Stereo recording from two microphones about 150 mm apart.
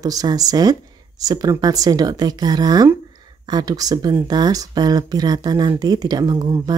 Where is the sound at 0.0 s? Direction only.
25° right (ahead or behind).